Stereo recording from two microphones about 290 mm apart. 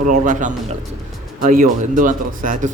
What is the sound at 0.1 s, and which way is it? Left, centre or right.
Speech, right.